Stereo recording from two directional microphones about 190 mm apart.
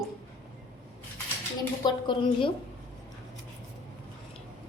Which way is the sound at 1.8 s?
25° left (ahead or behind).